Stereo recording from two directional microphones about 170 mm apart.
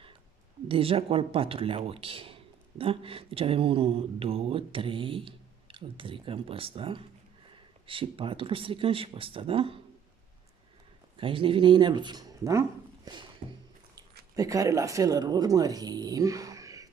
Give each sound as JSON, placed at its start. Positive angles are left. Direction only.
{"t": 0.7, "sound": "speech", "side_deg": -35}
{"t": 11.1, "sound": "speech", "side_deg": -30}
{"t": 14.3, "sound": "speech", "side_deg": -20}